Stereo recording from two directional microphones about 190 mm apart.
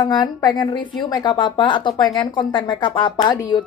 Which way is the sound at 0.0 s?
20° left (ahead or behind).